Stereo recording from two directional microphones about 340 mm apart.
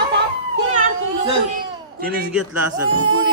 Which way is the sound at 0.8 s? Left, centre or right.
Centre.